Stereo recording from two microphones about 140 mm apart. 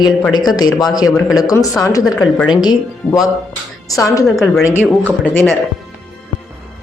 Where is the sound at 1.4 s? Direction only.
25° left (ahead or behind).